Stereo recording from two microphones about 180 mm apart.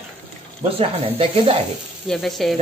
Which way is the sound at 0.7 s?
30° right (ahead or behind).